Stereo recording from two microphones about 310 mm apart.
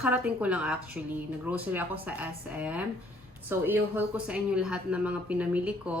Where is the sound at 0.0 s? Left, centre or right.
Centre.